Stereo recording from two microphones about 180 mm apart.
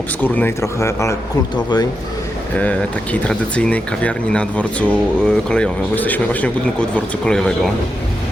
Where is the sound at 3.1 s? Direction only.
5° left (ahead or behind).